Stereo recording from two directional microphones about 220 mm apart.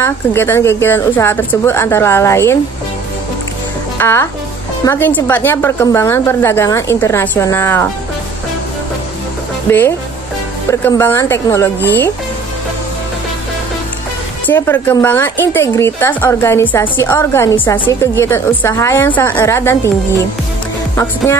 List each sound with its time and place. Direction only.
0.0 s a woman's voice: 10° left (ahead or behind)
4.0 s a woman's voice: 10° left (ahead or behind)
9.7 s a woman's voice: 10° left (ahead or behind)
14.4 s a woman's voice: 10° left (ahead or behind)
20.9 s speech: 10° left (ahead or behind)